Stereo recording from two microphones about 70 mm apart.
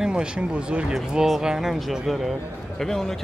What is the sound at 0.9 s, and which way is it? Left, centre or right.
Speech, centre.